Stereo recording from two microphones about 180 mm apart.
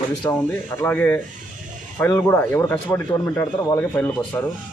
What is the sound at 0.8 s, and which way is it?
Speech, 10° left (ahead or behind).